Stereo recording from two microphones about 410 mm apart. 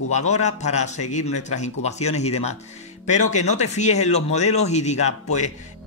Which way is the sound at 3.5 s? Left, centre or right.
Centre.